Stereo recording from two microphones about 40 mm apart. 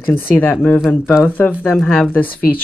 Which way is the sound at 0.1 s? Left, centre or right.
Left.